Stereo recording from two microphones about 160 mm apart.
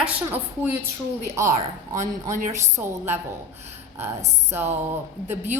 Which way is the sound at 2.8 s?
15° right (ahead or behind).